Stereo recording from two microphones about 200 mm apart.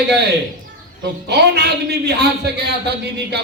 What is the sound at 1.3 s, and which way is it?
A man's voice, 55° right (ahead or behind).